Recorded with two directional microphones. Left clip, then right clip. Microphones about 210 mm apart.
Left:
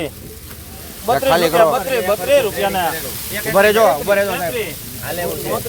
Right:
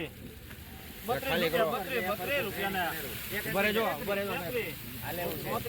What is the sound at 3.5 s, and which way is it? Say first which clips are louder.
Speech: left 18 dB; 35° left (ahead or behind).